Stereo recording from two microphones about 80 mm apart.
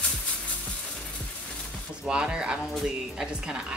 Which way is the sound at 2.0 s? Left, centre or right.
Centre.